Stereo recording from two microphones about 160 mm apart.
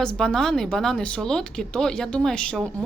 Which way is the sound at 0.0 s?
5° left (ahead or behind).